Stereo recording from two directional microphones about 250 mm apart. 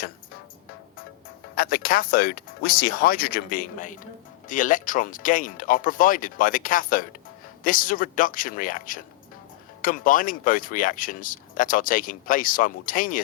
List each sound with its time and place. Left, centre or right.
1.5 s speech: left